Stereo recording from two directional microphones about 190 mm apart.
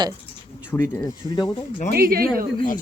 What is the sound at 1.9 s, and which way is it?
Speech, 50° right (ahead or behind).